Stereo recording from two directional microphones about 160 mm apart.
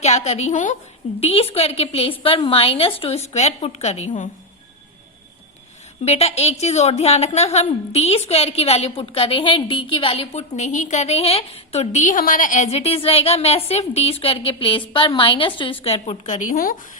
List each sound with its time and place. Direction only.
0.0 s a woman's voice: 40° left (ahead or behind)
1.2 s a woman's voice: 40° left (ahead or behind)
6.1 s a woman's voice: 40° left (ahead or behind); by 16.7 s 60° left (ahead or behind)